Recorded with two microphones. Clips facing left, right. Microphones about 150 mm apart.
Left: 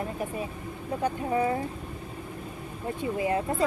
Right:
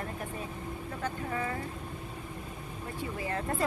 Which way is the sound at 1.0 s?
20° left (ahead or behind).